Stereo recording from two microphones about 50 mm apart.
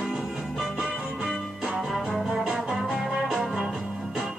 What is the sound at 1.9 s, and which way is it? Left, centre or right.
Music, centre.